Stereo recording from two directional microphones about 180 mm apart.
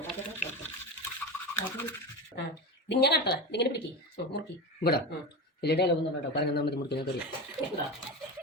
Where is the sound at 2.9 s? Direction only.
70° left (ahead or behind).